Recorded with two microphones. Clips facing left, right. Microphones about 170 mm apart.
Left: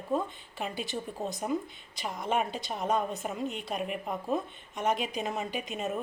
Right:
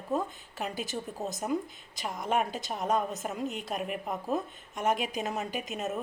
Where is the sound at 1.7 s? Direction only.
45° right (ahead or behind).